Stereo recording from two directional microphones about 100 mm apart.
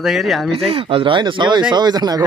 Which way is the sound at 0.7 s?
70° right (ahead or behind).